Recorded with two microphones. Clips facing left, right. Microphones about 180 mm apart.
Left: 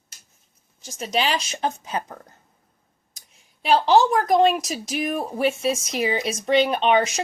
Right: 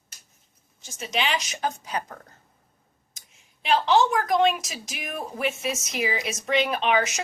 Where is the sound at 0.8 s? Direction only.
40° left (ahead or behind); by 2.2 s 20° left (ahead or behind).